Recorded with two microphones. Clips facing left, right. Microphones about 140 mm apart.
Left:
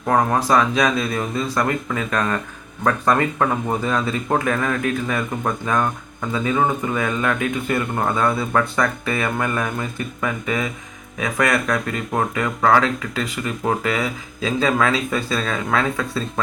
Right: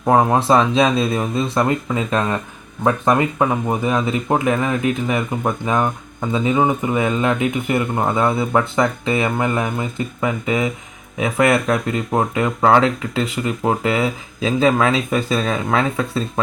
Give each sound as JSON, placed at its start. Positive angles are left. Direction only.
{"t": 0.0, "sound": "speech", "side_deg": -20}